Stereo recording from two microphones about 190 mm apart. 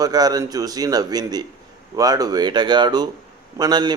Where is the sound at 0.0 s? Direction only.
20° right (ahead or behind).